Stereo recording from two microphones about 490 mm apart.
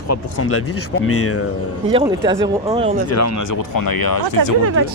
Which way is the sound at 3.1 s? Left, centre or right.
Left.